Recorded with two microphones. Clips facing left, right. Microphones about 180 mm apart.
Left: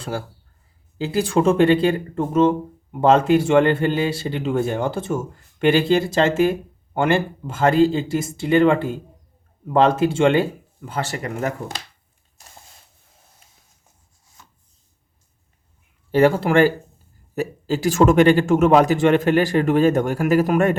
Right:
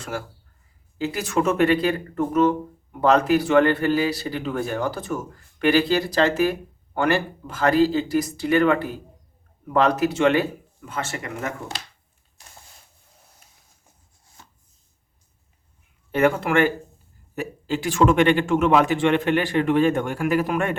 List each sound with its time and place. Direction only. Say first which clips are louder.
0.0 s speech: left 3 dB; 30° left (ahead or behind)
16.1 s a man's voice: left 4 dB; 30° left (ahead or behind)